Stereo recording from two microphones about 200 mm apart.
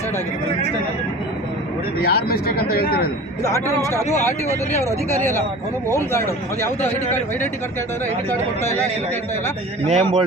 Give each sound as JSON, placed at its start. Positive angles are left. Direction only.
{"t": 2.0, "sound": "speech", "side_deg": 50}
{"t": 4.4, "sound": "a man's voice", "side_deg": 15}
{"t": 9.8, "sound": "a man's voice", "side_deg": -30}